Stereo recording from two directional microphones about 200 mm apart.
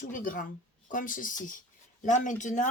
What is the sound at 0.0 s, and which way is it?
Speech, 40° left (ahead or behind).